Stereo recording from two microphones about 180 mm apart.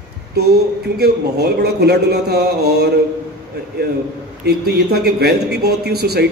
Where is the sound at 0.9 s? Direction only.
65° right (ahead or behind).